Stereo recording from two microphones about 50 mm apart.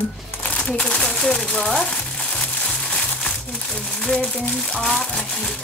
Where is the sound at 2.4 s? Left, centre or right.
Left.